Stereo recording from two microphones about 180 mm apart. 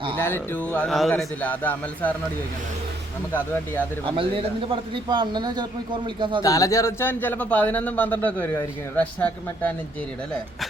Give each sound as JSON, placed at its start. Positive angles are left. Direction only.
{"t": 0.2, "sound": "speech", "side_deg": 10}
{"t": 4.1, "sound": "a man's voice", "side_deg": -30}
{"t": 6.4, "sound": "speech", "side_deg": 20}